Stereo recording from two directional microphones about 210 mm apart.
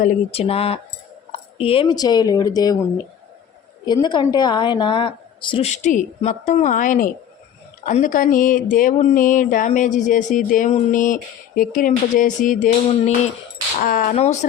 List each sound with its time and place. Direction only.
0.0 s a woman's voice: 30° left (ahead or behind)
3.8 s a woman's voice: 20° left (ahead or behind); by 12.7 s 40° left (ahead or behind)
13.8 s speech: 40° left (ahead or behind)